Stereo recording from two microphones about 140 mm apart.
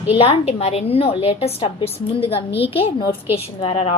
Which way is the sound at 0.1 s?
45° left (ahead or behind).